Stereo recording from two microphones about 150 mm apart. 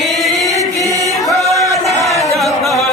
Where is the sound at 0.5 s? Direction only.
20° right (ahead or behind).